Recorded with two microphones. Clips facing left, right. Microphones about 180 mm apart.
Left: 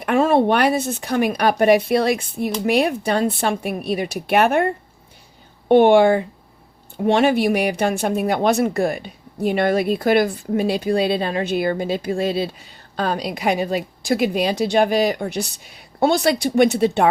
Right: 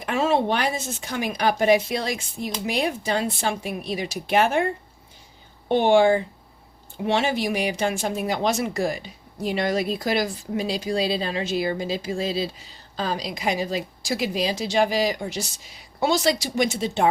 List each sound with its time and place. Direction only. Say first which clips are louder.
0.0 s speech: left 6 dB; 55° left (ahead or behind)